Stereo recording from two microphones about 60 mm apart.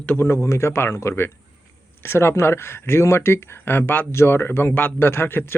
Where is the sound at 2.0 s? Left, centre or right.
Left.